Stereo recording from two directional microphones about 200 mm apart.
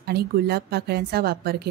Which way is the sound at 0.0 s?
55° right (ahead or behind).